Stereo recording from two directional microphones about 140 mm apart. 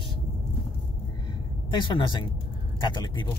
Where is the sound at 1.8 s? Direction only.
35° left (ahead or behind).